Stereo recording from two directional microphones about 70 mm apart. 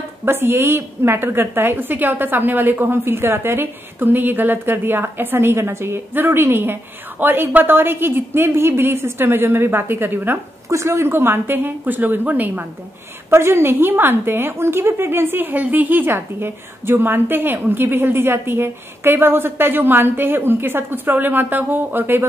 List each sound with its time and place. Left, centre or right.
0.2 s a woman's voice: right
10.7 s a woman's voice: right